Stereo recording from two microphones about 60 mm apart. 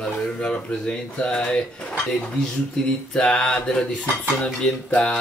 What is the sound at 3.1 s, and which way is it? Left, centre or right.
Speech, centre.